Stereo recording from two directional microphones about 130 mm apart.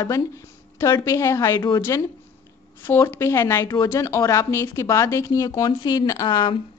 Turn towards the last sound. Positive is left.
turn(degrees=35)  # may be behind; listen again after turning